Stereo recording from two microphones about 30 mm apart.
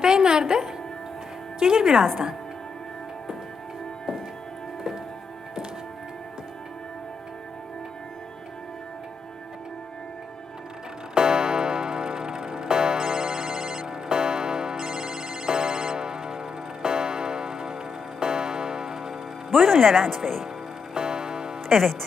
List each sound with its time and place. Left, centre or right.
0.0 s music: right
1.5 s speech: right
11.1 s music: right
16.8 s tick-tock: right
18.2 s music: right